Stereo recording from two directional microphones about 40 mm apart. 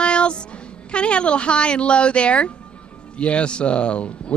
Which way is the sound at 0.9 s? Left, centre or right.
Left.